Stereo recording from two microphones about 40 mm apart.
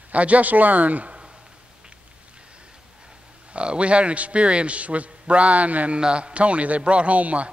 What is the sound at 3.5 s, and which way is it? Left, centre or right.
A man's voice, right.